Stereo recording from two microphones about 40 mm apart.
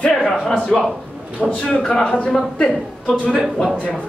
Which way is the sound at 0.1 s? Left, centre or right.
Centre.